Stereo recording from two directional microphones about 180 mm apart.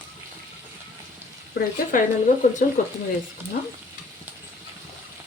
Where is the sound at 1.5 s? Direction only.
45° left (ahead or behind).